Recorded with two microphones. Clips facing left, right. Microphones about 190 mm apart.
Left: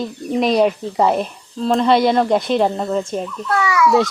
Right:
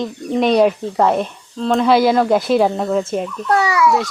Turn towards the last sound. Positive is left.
turn(degrees=-30)  # may be behind; listen again after turning